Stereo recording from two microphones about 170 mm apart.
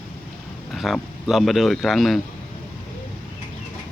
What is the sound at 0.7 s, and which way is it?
Speech, centre (ahead or behind).